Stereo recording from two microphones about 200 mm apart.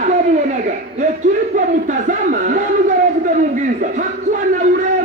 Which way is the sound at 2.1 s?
40° right (ahead or behind).